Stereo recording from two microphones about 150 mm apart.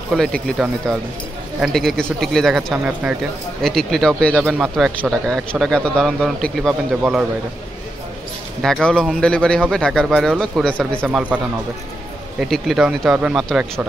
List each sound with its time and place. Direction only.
0.1 s a man's voice: 5° left (ahead or behind)
8.6 s a man's voice: 5° left (ahead or behind)
11.0 s a man's voice: 10° right (ahead or behind)